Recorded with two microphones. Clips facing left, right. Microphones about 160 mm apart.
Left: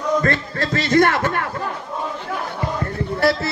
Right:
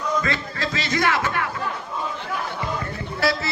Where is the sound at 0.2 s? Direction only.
55° left (ahead or behind).